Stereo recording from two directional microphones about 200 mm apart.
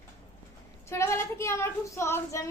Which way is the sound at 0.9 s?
15° left (ahead or behind).